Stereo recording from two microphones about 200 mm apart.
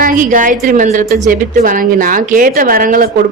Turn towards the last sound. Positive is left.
turn(degrees=-45)  # may be behind; listen again after turning